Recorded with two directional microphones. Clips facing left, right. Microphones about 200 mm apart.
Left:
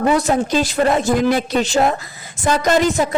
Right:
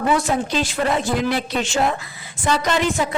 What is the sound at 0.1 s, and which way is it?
A woman's voice, 40° left (ahead or behind).